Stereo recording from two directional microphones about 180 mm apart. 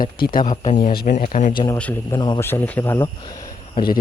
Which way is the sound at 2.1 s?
25° left (ahead or behind).